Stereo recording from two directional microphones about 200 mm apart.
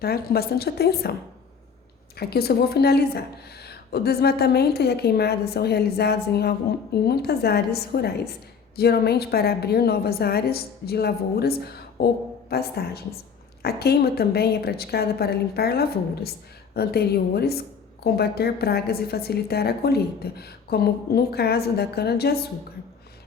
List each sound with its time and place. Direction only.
0.0 s a woman's voice: 50° left (ahead or behind)
2.1 s a woman's voice: 50° left (ahead or behind)